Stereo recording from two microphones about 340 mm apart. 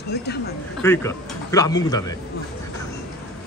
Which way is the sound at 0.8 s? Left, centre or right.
Centre.